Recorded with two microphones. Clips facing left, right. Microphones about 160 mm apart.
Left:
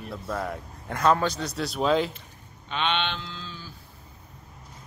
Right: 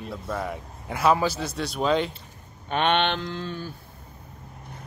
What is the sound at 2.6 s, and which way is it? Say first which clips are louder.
Speech: right 5 dB; 50° right (ahead or behind).